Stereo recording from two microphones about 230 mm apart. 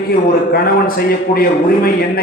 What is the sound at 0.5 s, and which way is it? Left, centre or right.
A man's voice, left.